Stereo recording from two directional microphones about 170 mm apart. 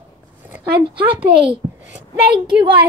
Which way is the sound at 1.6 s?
35° right (ahead or behind).